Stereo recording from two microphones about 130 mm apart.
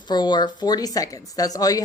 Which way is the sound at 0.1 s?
35° left (ahead or behind).